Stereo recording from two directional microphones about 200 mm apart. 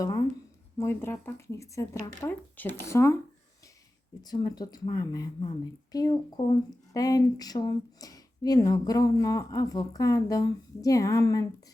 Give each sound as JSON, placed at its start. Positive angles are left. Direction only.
{"t": 0.8, "sound": "speech", "side_deg": 10}
{"t": 4.2, "sound": "speech", "side_deg": 20}